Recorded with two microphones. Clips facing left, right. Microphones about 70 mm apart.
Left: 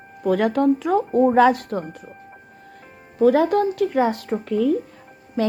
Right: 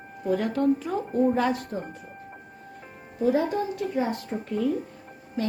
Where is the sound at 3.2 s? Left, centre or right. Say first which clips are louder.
Left 8 dB; left.